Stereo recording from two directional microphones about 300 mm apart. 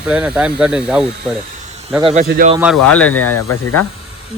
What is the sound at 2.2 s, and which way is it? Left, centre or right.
Speech, right.